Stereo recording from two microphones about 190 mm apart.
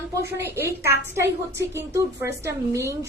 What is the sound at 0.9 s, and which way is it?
A woman's voice, 10° right (ahead or behind).